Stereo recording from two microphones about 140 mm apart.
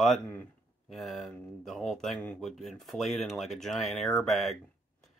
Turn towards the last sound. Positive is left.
turn(degrees=0)  # may be behind; listen again after turning